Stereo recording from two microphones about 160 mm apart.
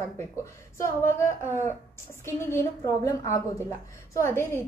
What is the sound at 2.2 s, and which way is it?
A woman's voice, 15° left (ahead or behind).